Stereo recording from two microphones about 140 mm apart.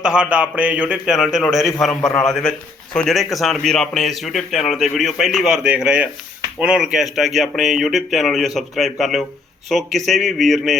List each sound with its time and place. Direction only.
0.0 s a man's voice: 5° right (ahead or behind)